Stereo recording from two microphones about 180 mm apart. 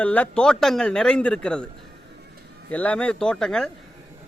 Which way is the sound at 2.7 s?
10° left (ahead or behind).